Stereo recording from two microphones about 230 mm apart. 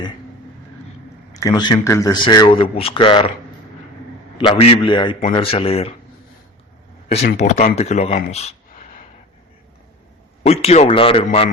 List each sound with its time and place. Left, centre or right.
1.3 s a man's voice: centre
4.4 s a man's voice: left
7.3 s a man's voice: left
10.4 s a man's voice: left